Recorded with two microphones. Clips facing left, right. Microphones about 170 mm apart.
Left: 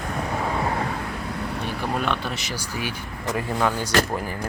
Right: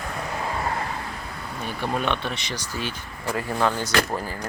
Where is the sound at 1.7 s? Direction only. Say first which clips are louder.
Right 1 dB; centre (ahead or behind).